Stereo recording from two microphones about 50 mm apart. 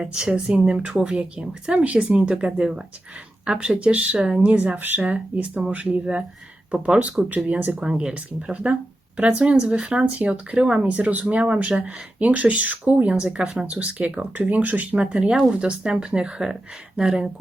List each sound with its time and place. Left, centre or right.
0.0 s speech: centre
7.8 s speech: centre
15.0 s speech: centre